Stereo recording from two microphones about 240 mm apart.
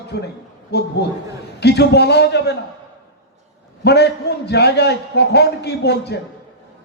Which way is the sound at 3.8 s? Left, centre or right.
Left.